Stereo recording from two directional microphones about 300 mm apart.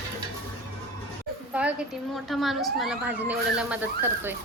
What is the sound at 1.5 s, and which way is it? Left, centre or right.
Speech, centre.